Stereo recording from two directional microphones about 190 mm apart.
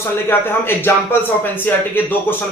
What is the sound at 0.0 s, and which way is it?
Speech, 10° left (ahead or behind).